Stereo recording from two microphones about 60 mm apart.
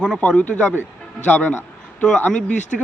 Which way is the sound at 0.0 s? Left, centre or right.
Centre.